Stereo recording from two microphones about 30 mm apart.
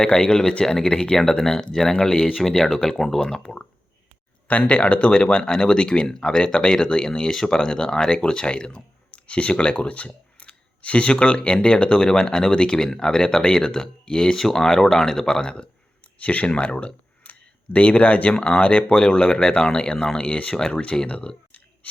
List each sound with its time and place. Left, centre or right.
0.0 s speech: left
2.6 s speech: centre
4.6 s speech: left
14.3 s speech: centre
16.2 s speech: left
16.6 s speech: left
17.2 s a sound: left
18.3 s speech: left